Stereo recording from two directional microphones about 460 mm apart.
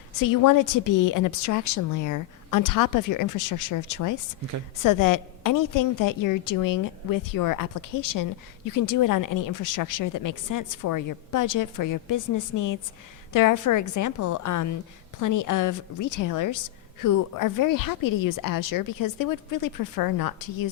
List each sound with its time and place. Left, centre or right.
0.2 s a woman's voice: left